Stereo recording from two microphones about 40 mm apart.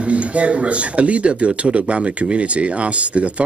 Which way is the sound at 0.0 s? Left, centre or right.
Right.